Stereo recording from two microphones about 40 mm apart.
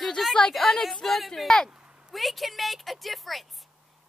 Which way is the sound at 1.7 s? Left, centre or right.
Right.